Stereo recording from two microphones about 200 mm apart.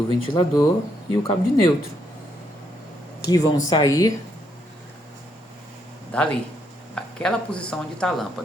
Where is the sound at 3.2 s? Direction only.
20° left (ahead or behind).